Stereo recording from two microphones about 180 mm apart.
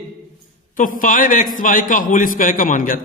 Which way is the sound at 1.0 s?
45° left (ahead or behind).